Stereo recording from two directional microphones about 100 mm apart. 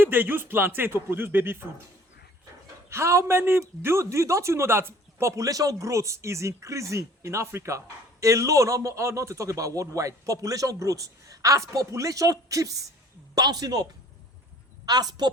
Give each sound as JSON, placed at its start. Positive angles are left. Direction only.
{"t": 0.0, "sound": "speech", "side_deg": -20}
{"t": 2.9, "sound": "a man's voice", "side_deg": -25}
{"t": 14.8, "sound": "a man's voice", "side_deg": -40}